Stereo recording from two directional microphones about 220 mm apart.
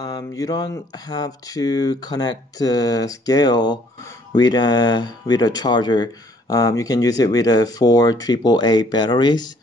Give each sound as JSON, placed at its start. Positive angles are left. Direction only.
{"t": 0.0, "sound": "speech", "side_deg": 15}